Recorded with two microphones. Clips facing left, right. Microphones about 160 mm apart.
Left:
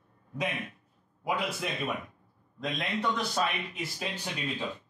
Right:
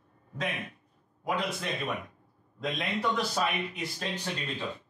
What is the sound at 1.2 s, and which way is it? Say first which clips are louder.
A man's voice: even; 5° left (ahead or behind).